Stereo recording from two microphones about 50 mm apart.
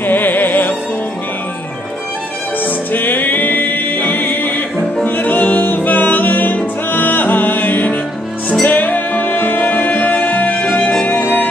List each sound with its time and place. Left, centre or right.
0.0 s music: left
2.6 s music: left